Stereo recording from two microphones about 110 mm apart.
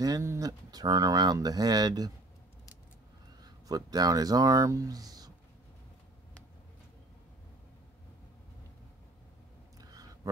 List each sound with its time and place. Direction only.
0.0 s speech: 30° right (ahead or behind)
3.4 s speech: 35° right (ahead or behind)
9.8 s clicking: 35° right (ahead or behind)